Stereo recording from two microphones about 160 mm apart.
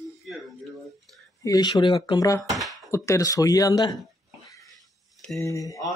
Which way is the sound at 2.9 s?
20° left (ahead or behind).